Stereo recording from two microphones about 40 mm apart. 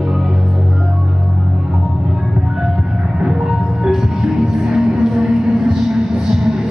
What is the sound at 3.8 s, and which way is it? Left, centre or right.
Music, centre.